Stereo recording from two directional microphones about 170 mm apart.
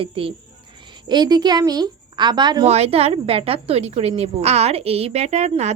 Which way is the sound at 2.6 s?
35° right (ahead or behind).